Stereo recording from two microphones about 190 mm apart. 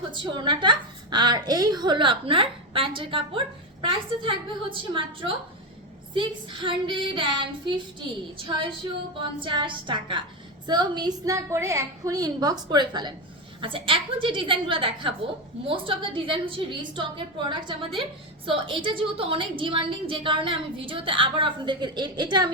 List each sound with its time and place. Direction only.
0.1 s a woman's voice: 25° right (ahead or behind)
9.1 s a woman's voice: 25° right (ahead or behind)